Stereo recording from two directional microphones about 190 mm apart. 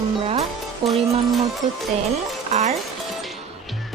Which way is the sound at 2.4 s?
35° right (ahead or behind).